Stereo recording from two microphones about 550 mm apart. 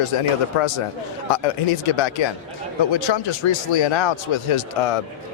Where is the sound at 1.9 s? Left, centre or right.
Left.